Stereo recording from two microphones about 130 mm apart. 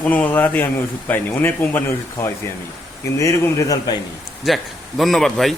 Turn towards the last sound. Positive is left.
turn(degrees=0)  # may be behind; listen again after turning